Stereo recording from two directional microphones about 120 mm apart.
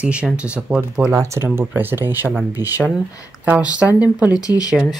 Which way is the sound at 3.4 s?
10° right (ahead or behind).